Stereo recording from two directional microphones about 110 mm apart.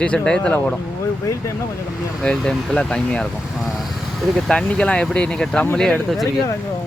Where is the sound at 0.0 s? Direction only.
10° left (ahead or behind).